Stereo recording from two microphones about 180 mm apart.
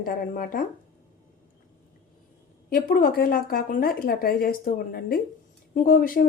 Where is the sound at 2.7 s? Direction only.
50° left (ahead or behind).